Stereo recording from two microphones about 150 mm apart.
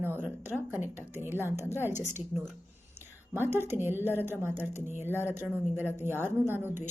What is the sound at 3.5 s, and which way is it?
A woman's voice, 15° right (ahead or behind).